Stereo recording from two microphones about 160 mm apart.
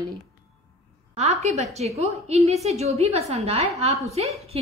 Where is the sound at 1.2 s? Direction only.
45° right (ahead or behind).